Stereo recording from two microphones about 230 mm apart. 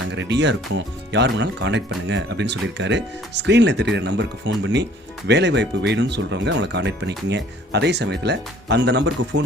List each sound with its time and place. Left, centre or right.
0.1 s speech: right